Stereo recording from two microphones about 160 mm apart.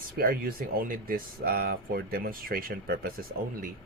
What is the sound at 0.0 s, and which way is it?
Speech, 65° right (ahead or behind).